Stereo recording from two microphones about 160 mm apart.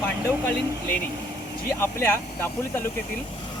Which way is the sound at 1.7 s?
15° left (ahead or behind).